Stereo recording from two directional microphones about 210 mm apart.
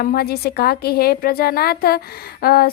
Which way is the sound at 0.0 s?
45° left (ahead or behind).